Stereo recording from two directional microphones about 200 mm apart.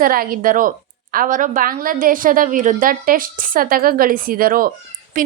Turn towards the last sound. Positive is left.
turn(degrees=-40)  # may be behind; listen again after turning